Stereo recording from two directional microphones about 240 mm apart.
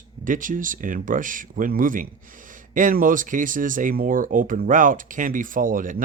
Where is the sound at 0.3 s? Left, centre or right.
Right.